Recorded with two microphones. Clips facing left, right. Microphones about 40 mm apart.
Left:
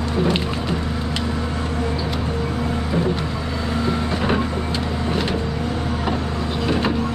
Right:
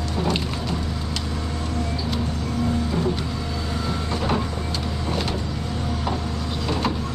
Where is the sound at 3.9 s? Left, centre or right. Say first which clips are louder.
Left 3 dB; left.